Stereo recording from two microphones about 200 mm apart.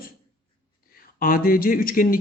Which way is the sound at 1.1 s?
45° left (ahead or behind).